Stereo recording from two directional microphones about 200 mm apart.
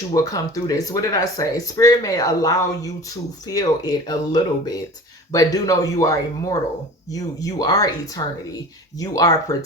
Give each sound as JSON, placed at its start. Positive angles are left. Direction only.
{"t": 0.1, "sound": "speech", "side_deg": 15}